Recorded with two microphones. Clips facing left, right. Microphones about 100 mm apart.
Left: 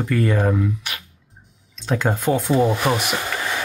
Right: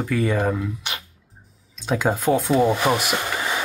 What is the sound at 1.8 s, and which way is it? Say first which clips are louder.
Speech: even; 5° right (ahead or behind).